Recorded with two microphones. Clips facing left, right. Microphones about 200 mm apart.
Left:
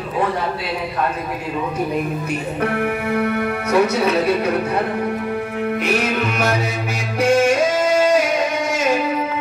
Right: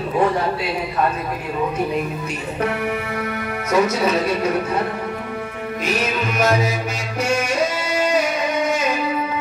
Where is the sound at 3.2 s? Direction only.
60° left (ahead or behind).